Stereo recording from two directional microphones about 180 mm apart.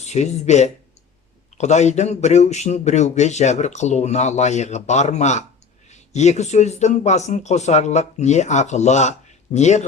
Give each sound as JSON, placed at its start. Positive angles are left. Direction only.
{"t": 0.0, "sound": "speech", "side_deg": 40}